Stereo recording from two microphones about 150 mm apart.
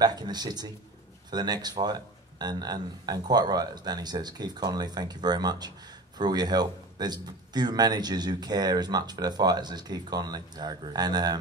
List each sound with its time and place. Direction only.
0.0 s speech: 25° right (ahead or behind)